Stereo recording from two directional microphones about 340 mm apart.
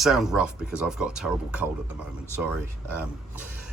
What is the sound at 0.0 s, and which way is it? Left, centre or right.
Speech, centre.